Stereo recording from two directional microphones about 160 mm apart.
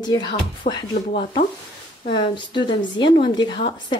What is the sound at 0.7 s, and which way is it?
Speech, 55° left (ahead or behind).